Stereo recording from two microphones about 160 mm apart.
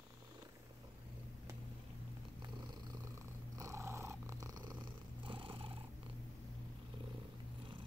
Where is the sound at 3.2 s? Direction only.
20° right (ahead or behind).